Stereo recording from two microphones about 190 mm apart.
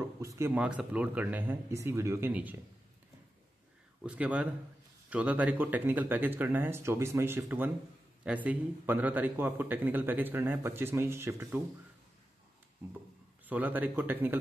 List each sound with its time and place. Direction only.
0.2 s a man's voice: 15° right (ahead or behind)
4.0 s a man's voice: 5° right (ahead or behind)
13.5 s a man's voice: 10° right (ahead or behind)